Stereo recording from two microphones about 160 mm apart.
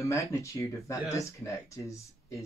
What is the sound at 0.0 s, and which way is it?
Speech, 20° left (ahead or behind).